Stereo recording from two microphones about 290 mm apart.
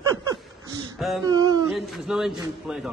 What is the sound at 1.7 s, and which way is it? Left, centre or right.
A man's voice, centre.